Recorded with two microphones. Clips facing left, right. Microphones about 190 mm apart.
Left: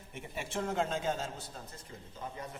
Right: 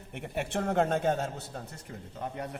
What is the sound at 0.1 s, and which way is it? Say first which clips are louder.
A man's voice: right 6 dB; 65° right (ahead or behind).